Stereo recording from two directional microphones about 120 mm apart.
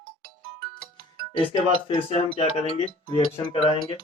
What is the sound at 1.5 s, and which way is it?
Speech, 55° left (ahead or behind).